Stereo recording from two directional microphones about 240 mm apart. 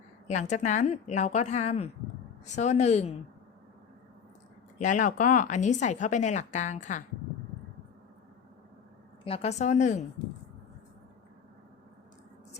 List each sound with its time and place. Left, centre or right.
0.3 s a woman's voice: left
4.8 s speech: left
9.2 s a woman's voice: left